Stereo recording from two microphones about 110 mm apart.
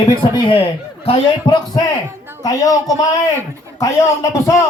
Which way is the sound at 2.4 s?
35° left (ahead or behind).